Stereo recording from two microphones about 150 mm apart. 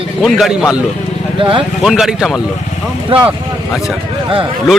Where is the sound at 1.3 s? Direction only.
35° right (ahead or behind).